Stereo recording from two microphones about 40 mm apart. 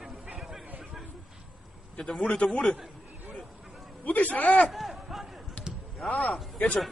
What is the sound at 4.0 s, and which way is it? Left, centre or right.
Speech, left.